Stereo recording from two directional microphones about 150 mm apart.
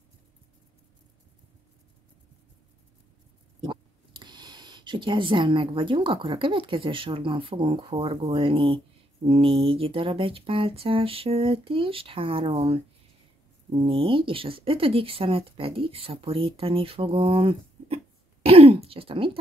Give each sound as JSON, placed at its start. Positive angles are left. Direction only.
{"t": 3.6, "sound": "speech", "side_deg": -30}